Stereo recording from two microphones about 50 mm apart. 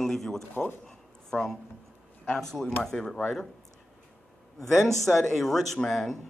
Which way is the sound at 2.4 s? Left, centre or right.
Centre.